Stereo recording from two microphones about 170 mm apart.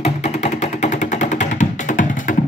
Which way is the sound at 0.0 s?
40° left (ahead or behind).